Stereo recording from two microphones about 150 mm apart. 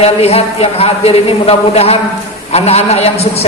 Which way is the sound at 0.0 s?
45° left (ahead or behind).